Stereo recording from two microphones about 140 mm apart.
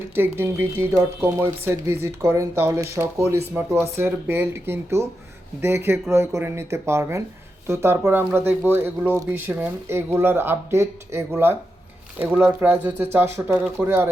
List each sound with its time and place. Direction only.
0.1 s speech: 15° right (ahead or behind)